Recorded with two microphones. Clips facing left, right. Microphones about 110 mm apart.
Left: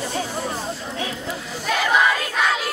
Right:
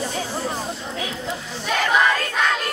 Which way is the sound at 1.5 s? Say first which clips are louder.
Even; centre (ahead or behind).